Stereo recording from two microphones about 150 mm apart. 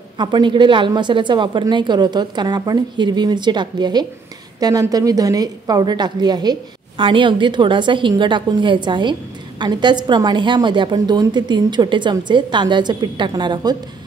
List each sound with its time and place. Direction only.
0.2 s a woman's voice: 30° right (ahead or behind)